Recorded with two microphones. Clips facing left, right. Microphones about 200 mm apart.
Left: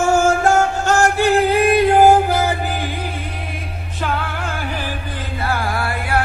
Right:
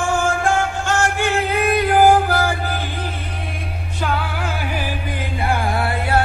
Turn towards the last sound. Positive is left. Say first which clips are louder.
# right 2 dB
turn(degrees=-25)  # may be behind; listen again after turning